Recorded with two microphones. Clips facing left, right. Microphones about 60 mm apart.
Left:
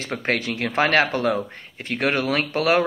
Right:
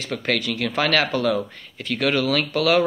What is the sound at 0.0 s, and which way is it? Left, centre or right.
Speech, left.